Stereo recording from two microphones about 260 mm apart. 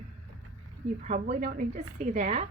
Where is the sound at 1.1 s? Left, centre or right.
Right.